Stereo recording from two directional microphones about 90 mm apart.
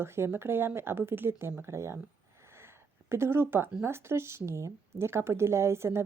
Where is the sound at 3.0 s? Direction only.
30° right (ahead or behind).